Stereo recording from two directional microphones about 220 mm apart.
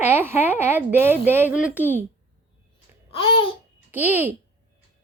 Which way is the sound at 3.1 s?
25° left (ahead or behind).